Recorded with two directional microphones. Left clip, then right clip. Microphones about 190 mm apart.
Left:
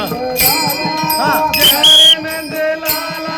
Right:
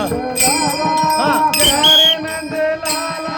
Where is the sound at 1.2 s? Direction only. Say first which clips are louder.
Left 2 dB; 50° right (ahead or behind).